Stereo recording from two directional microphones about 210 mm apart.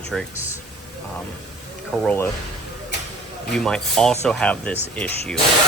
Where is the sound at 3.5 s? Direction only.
5° left (ahead or behind).